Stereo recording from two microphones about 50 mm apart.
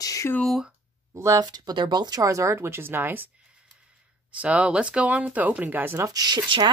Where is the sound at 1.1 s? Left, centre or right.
Right.